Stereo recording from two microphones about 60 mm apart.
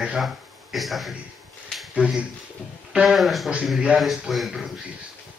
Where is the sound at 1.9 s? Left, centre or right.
Centre.